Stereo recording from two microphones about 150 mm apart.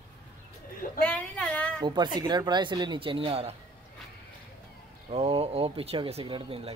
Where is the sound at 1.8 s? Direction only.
30° right (ahead or behind).